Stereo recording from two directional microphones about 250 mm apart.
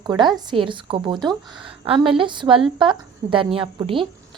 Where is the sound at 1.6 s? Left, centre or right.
Right.